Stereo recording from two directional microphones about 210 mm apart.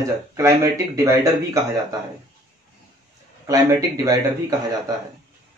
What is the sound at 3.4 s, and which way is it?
Speech, 15° right (ahead or behind).